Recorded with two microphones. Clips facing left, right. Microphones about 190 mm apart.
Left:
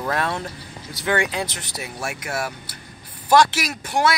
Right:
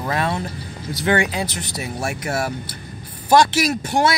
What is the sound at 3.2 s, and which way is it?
Speech, 15° right (ahead or behind).